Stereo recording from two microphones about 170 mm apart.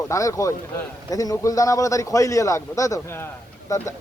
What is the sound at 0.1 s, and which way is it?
A man's voice, 20° left (ahead or behind).